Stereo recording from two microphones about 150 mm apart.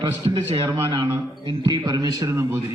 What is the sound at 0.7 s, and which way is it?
A man's voice, 25° right (ahead or behind).